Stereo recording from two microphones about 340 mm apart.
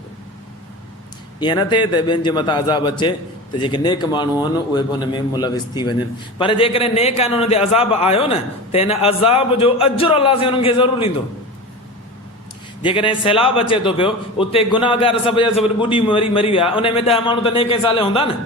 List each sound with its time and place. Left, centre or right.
1.4 s a man's voice: centre
12.8 s a man's voice: centre